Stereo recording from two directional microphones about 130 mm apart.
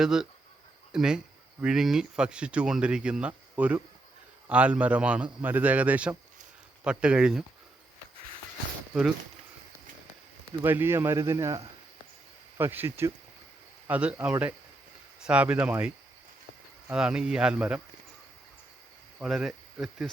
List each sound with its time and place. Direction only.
0.0 s a man's voice: 5° right (ahead or behind)
10.6 s a man's voice: 15° right (ahead or behind)
16.9 s a man's voice: 5° right (ahead or behind)
19.2 s speech: 5° right (ahead or behind)